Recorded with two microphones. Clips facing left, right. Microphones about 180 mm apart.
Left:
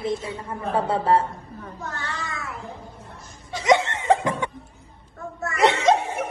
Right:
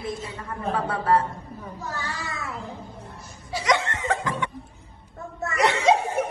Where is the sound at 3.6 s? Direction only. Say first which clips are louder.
Left 6 dB; 25° left (ahead or behind).